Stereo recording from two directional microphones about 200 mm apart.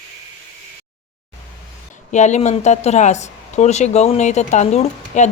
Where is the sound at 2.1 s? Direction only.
35° left (ahead or behind).